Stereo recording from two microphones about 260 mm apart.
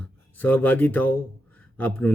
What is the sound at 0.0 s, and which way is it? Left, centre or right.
Speech, centre.